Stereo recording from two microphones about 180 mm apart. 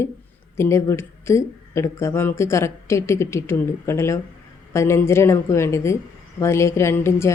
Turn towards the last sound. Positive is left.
turn(degrees=15)  # may be behind; listen again after turning